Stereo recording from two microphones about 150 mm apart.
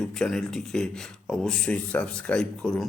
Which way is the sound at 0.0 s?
5° left (ahead or behind).